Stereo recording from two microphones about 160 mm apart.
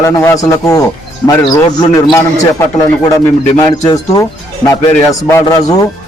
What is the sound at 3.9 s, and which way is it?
A man's voice, 20° left (ahead or behind).